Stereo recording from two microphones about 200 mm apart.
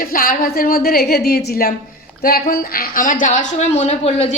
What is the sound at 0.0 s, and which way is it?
A woman's voice, 45° left (ahead or behind).